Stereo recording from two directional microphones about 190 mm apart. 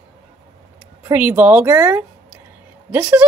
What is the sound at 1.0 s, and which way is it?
A woman's voice, 10° right (ahead or behind).